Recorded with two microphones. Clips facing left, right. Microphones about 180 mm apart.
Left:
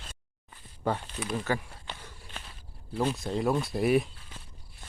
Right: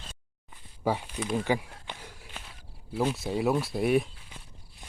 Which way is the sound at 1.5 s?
15° right (ahead or behind).